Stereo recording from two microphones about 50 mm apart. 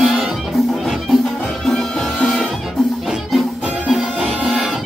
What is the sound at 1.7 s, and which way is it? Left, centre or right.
Music, centre.